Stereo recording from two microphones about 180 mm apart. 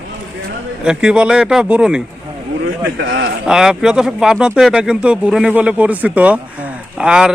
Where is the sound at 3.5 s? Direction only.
5° right (ahead or behind).